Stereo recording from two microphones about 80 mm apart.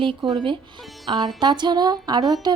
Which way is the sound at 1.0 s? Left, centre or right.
Right.